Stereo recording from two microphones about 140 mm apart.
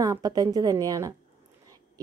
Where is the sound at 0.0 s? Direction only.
25° right (ahead or behind).